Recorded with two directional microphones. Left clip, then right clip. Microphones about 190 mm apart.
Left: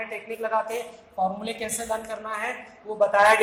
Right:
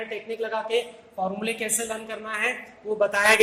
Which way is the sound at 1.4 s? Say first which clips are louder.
Right 3 dB; 35° right (ahead or behind).